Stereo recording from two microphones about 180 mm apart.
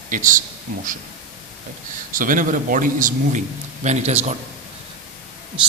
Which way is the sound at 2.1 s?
50° right (ahead or behind).